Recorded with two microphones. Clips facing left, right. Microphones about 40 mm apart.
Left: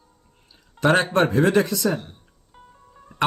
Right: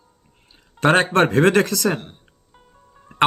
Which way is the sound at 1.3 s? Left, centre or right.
Right.